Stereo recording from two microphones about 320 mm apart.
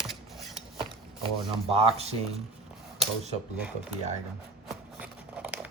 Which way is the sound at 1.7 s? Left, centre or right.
Centre.